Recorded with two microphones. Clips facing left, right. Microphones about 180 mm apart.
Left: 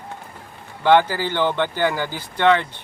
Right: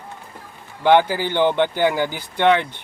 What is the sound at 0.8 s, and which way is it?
Speech, 15° right (ahead or behind).